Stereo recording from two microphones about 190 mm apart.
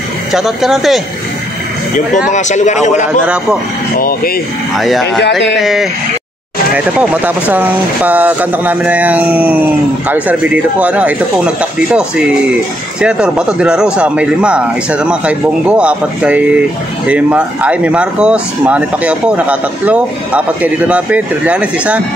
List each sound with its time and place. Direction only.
0.3 s speech: centre (ahead or behind)
2.3 s speech: 40° left (ahead or behind)
3.9 s speech: 50° left (ahead or behind)
4.7 s speech: centre (ahead or behind)
13.0 s speech: 5° right (ahead or behind)